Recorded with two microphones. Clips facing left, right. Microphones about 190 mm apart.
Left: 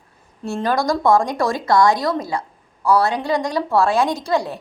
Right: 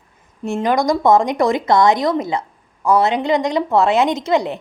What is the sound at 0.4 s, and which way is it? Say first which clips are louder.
A woman's voice: right 3 dB; 20° right (ahead or behind).